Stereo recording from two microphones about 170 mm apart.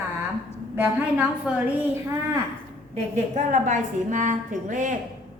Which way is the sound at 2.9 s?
40° right (ahead or behind).